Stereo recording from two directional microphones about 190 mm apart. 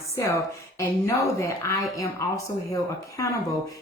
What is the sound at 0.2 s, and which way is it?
Speech, 15° left (ahead or behind).